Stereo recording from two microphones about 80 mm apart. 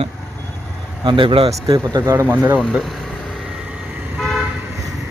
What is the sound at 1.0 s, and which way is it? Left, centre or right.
Speech, right.